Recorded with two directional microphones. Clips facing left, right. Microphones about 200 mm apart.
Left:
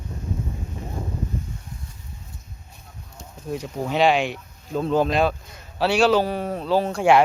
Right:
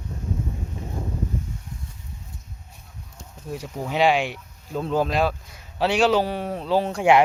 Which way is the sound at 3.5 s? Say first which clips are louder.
Left 3 dB; 10° right (ahead or behind).